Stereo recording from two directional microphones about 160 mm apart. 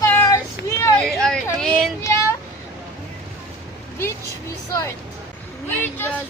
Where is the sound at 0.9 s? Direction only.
5° left (ahead or behind).